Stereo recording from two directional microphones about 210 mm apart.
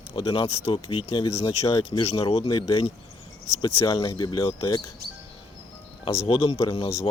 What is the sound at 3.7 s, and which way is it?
Speech, 15° left (ahead or behind).